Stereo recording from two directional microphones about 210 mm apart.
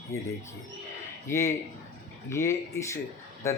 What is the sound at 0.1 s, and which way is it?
Speech, 15° left (ahead or behind).